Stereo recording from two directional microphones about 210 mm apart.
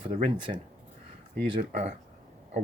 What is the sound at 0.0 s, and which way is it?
Speech, 25° right (ahead or behind).